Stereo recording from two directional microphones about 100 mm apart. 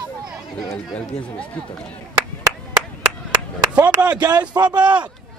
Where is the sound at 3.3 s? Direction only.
15° right (ahead or behind).